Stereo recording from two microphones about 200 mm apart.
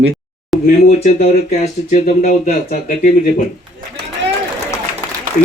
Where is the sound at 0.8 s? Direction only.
35° left (ahead or behind).